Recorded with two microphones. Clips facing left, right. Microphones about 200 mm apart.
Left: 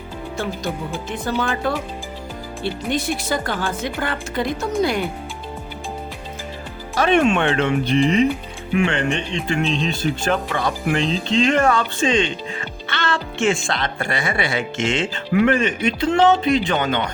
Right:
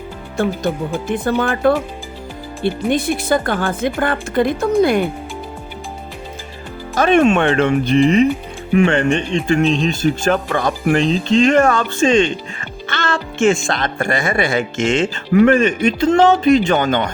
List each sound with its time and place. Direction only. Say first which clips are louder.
0.7 s a woman's voice: right 6 dB; 50° right (ahead or behind)
6.9 s speech: right 4 dB; 45° right (ahead or behind)